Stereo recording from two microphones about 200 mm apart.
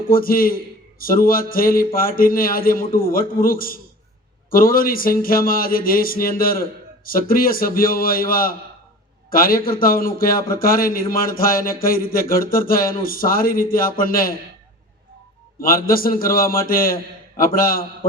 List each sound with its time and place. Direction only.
0.1 s a man's voice: 45° left (ahead or behind)
15.6 s a man's voice: 45° left (ahead or behind)